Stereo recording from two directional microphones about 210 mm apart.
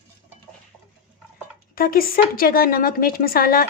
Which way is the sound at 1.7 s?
45° left (ahead or behind).